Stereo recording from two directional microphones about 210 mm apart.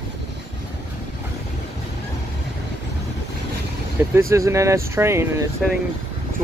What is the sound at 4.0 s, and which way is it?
Speech, 10° right (ahead or behind).